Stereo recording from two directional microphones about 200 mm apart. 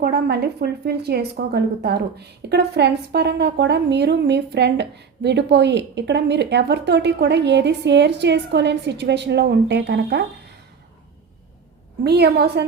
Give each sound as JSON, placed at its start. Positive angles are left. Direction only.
{"t": 0.0, "sound": "a woman's voice", "side_deg": -55}
{"t": 12.0, "sound": "a woman's voice", "side_deg": -55}